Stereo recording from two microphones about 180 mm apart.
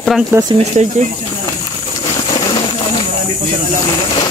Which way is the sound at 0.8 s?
40° right (ahead or behind).